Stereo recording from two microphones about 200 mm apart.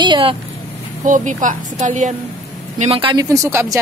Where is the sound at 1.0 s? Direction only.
40° right (ahead or behind).